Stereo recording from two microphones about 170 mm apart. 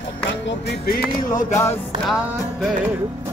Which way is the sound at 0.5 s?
70° left (ahead or behind).